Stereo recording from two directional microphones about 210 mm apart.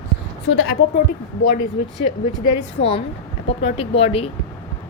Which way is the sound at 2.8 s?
30° left (ahead or behind).